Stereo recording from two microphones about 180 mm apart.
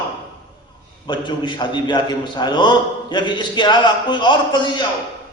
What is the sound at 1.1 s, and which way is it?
A man's voice, 25° left (ahead or behind).